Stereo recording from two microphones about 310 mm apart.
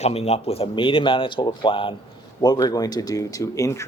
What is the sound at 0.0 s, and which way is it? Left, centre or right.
Speech, centre.